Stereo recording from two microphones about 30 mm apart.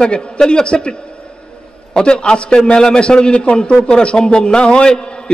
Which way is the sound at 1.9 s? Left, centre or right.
Left.